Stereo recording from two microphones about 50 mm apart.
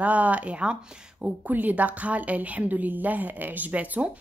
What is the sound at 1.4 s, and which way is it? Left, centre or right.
A woman's voice, right.